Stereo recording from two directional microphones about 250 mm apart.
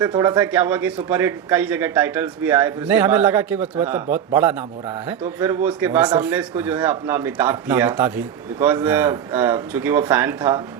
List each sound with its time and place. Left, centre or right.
0.0 s a man's voice: centre